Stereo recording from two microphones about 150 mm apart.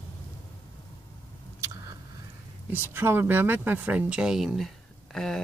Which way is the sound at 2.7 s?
15° right (ahead or behind).